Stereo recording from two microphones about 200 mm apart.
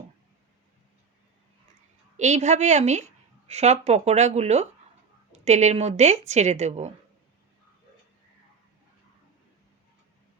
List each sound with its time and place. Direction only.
2.1 s a woman's voice: 35° right (ahead or behind)